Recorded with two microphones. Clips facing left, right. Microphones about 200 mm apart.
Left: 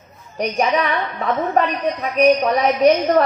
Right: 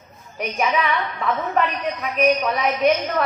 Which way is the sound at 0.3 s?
35° left (ahead or behind).